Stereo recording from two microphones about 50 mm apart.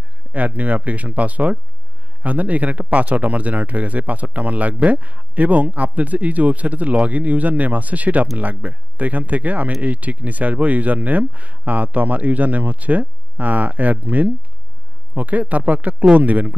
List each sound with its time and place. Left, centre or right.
0.3 s speech: right